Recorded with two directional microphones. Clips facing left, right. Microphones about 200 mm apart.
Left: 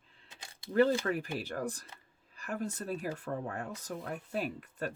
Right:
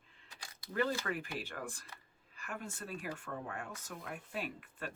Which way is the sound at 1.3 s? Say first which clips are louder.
Left 7 dB; 40° left (ahead or behind).